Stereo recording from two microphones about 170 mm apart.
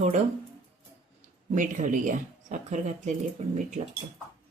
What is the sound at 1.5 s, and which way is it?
A woman's voice, 50° right (ahead or behind).